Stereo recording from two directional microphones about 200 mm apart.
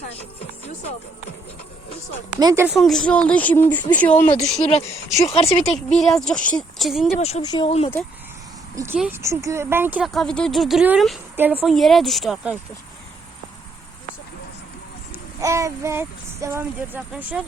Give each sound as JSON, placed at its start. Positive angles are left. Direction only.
{"t": 2.4, "sound": "speech", "side_deg": -15}
{"t": 2.6, "sound": "speech", "side_deg": 0}
{"t": 5.3, "sound": "speech", "side_deg": 30}
{"t": 5.9, "sound": "speech", "side_deg": 0}
{"t": 7.2, "sound": "speech", "side_deg": 35}
{"t": 7.4, "sound": "speech", "side_deg": 20}
{"t": 8.7, "sound": "speech", "side_deg": -15}
{"t": 15.1, "sound": "speech", "side_deg": -15}